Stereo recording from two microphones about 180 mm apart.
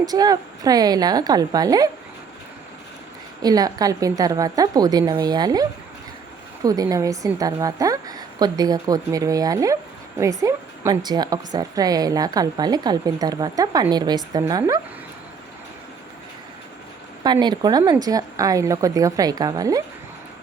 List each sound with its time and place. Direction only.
0.0 s a woman's voice: 20° right (ahead or behind)
3.4 s a woman's voice: 20° right (ahead or behind)
6.7 s a woman's voice: 20° right (ahead or behind)
17.4 s a woman's voice: 25° right (ahead or behind)